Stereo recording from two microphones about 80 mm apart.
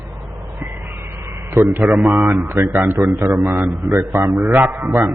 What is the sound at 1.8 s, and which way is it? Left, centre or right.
Speech, centre.